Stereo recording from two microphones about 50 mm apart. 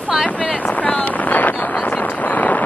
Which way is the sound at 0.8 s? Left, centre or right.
Left.